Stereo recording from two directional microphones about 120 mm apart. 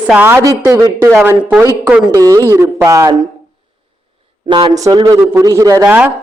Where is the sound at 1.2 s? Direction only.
10° right (ahead or behind).